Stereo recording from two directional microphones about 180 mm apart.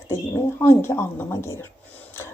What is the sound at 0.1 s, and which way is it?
Speech, 15° left (ahead or behind).